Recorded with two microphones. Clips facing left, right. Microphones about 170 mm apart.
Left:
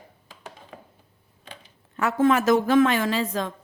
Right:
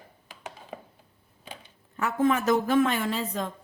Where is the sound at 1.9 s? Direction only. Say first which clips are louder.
Left 4 dB; 85° left.